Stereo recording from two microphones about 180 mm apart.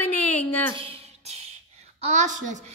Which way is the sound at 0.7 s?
35° right (ahead or behind).